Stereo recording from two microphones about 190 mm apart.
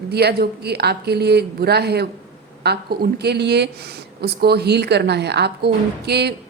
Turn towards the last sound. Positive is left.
turn(degrees=-60)  # may be behind; listen again after turning